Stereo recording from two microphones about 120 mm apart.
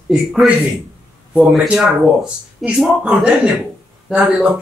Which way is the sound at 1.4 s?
Centre (ahead or behind).